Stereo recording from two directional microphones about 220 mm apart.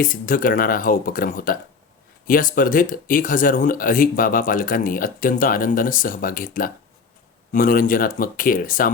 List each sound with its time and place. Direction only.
0.0 s speech: 40° left (ahead or behind)